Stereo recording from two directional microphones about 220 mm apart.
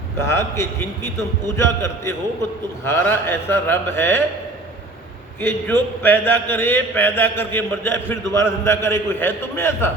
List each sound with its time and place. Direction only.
0.2 s a man's voice: 10° left (ahead or behind)
5.4 s a man's voice: 10° left (ahead or behind)